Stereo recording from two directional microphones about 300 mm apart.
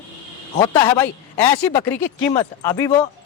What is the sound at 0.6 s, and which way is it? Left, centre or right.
Speech, centre.